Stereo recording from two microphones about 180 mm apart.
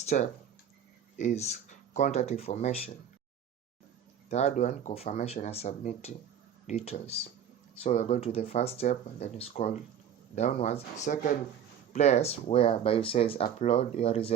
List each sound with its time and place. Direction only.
0.0 s speech: 40° left (ahead or behind)
4.3 s speech: 40° left (ahead or behind)